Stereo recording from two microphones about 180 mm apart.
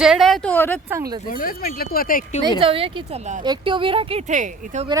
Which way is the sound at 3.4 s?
25° right (ahead or behind).